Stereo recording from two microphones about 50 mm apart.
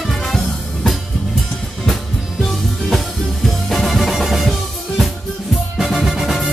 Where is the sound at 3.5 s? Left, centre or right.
Centre.